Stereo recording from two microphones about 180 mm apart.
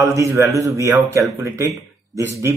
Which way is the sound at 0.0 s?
15° right (ahead or behind).